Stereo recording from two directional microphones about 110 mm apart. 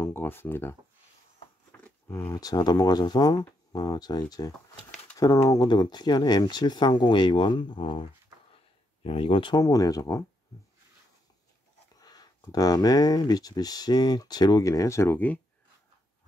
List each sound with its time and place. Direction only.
0.0 s speech: 20° left (ahead or behind)
1.7 s a sound: 15° left (ahead or behind)
2.3 s speech: 35° left (ahead or behind)
9.6 s speech: 35° left (ahead or behind)
12.0 s speech: 35° left (ahead or behind); by 15.4 s 15° left (ahead or behind)